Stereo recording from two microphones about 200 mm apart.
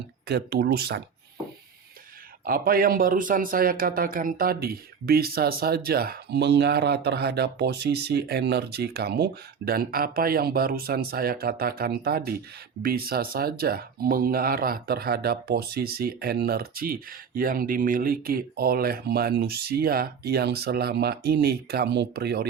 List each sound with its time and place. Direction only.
0.3 s speech: 50° right (ahead or behind)
2.5 s speech: 45° right (ahead or behind)